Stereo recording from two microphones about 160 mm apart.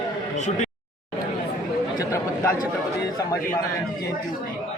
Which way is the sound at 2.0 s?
20° left (ahead or behind).